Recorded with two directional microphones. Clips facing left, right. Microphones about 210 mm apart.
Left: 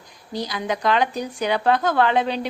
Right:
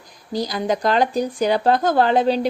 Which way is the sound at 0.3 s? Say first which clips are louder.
Right 4 dB; 40° right (ahead or behind).